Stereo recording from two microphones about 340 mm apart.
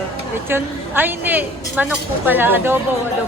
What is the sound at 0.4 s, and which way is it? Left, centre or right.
A woman's voice, centre.